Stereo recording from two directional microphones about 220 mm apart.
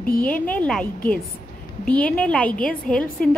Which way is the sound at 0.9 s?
40° left (ahead or behind).